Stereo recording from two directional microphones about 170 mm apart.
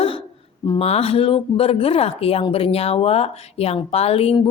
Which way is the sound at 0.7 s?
35° left (ahead or behind).